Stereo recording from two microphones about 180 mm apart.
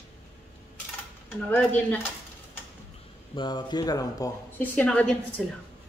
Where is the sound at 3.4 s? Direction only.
25° left (ahead or behind); by 5.4 s 5° left (ahead or behind).